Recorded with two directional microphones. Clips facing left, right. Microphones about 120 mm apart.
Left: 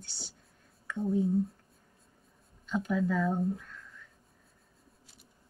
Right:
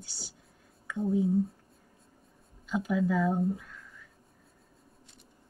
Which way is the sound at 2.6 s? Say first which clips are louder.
Right 1 dB; 5° right (ahead or behind).